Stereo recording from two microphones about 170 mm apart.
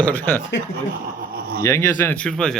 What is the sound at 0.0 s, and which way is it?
Speech, 10° left (ahead or behind).